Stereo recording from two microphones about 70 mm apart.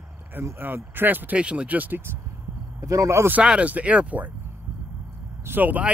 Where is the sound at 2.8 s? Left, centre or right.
Right.